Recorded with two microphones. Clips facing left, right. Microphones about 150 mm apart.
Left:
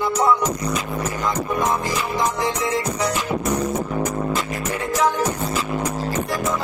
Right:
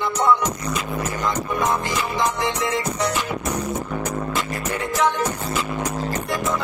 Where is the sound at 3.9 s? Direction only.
5° left (ahead or behind).